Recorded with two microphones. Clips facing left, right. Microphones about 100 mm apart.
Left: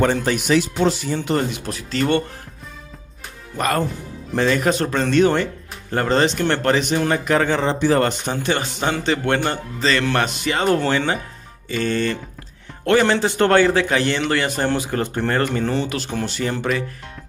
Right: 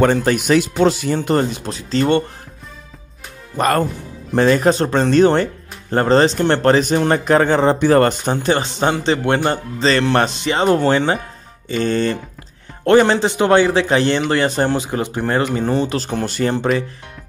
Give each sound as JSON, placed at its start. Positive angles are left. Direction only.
{"t": 0.0, "sound": "speech", "side_deg": -50}
{"t": 1.2, "sound": "speech", "side_deg": -40}
{"t": 1.7, "sound": "speech", "side_deg": -25}
{"t": 4.4, "sound": "speech", "side_deg": -35}
{"t": 8.4, "sound": "speech", "side_deg": -30}
{"t": 9.2, "sound": "speech", "side_deg": -15}
{"t": 9.8, "sound": "speech", "side_deg": -30}
{"t": 14.8, "sound": "speech", "side_deg": -20}
{"t": 15.9, "sound": "speech", "side_deg": -35}